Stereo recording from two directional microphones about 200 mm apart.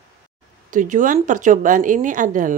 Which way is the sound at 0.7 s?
40° right (ahead or behind).